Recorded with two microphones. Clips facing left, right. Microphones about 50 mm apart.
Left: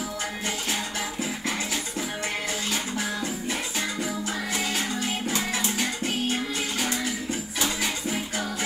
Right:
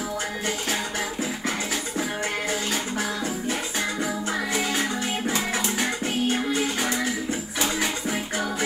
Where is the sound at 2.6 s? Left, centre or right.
Right.